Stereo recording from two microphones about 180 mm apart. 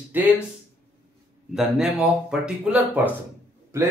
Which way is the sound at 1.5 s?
5° right (ahead or behind).